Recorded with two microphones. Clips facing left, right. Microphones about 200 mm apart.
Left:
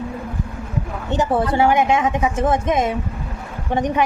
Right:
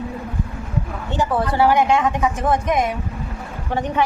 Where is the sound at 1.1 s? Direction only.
25° left (ahead or behind).